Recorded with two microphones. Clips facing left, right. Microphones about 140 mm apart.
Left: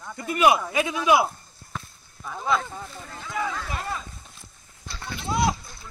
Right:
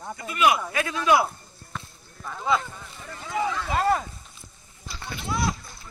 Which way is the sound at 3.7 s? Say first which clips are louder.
Right 9 dB; 80° right.